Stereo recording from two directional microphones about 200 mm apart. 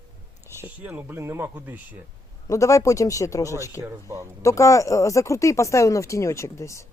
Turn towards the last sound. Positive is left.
turn(degrees=15)  # may be behind; listen again after turning